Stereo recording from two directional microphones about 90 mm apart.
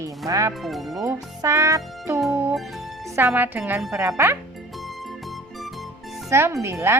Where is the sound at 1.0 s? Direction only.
35° right (ahead or behind).